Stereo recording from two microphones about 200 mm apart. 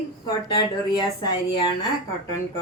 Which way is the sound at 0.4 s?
20° left (ahead or behind).